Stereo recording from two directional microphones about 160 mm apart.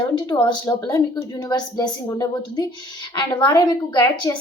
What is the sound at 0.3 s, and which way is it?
A woman's voice, 30° left (ahead or behind).